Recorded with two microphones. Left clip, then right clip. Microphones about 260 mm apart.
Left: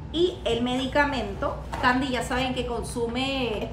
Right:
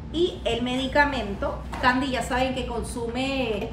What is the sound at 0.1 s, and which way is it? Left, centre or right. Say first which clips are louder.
A woman's voice: even; centre.